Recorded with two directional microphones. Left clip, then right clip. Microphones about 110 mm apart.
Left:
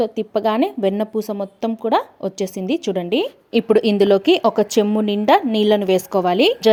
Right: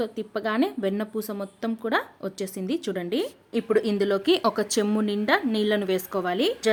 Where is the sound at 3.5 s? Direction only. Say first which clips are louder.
Left 8 dB; 55° left (ahead or behind).